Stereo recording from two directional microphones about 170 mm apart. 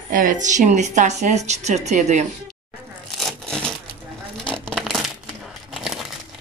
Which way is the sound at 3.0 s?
Centre (ahead or behind).